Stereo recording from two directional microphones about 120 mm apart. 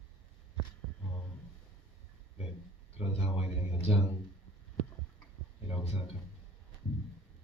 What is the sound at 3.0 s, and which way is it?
A man's voice, 60° left (ahead or behind).